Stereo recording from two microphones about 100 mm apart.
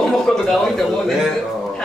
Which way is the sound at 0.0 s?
5° left (ahead or behind).